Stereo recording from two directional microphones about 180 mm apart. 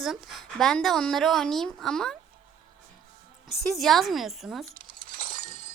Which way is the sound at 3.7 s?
Centre (ahead or behind).